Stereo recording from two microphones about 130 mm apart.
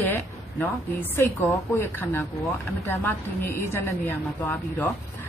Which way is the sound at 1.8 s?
15° left (ahead or behind).